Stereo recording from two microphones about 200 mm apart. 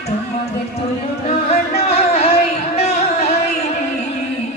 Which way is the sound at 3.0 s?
30° left (ahead or behind).